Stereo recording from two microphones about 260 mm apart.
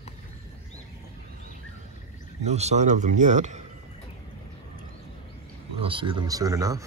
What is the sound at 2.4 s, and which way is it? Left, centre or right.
Speech, right.